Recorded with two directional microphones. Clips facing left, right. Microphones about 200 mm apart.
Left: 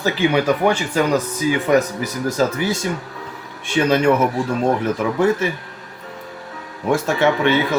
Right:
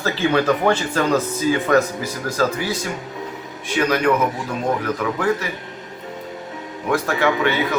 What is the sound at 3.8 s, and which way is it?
Speech, 25° left (ahead or behind).